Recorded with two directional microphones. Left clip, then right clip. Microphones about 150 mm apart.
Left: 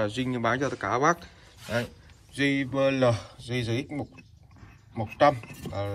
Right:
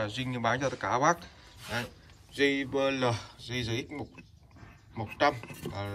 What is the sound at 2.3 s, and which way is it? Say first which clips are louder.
Speech: left 1 dB; centre (ahead or behind).